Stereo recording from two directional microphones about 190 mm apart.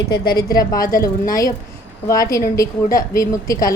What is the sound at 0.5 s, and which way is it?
A woman's voice, 20° left (ahead or behind).